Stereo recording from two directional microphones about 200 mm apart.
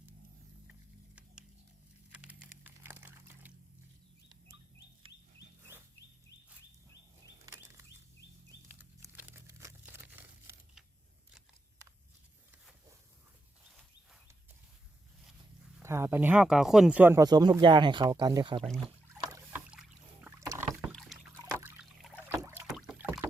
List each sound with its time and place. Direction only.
2.1 s computer keyboard: 10° right (ahead or behind)
7.4 s a sound: 15° right (ahead or behind)
15.8 s speech: 15° right (ahead or behind)
19.2 s boat: 20° right (ahead or behind)
19.7 s rowboat: 5° right (ahead or behind)
20.9 s rowboat: centre (ahead or behind)
22.2 s rowboat: 10° right (ahead or behind)